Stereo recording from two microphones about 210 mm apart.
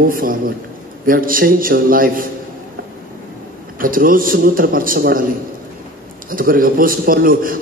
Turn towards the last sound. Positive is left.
turn(degrees=-40)  # may be behind; listen again after turning